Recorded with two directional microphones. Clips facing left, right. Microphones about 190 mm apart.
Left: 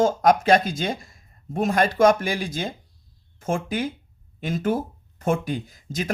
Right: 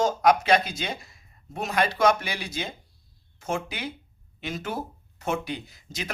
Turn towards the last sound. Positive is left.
turn(degrees=45)  # may be behind; listen again after turning